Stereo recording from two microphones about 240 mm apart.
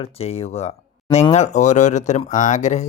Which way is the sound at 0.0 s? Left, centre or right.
Left.